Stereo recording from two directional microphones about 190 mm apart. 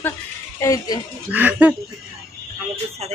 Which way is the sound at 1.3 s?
10° right (ahead or behind).